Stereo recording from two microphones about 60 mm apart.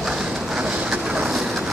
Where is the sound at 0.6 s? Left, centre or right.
Centre.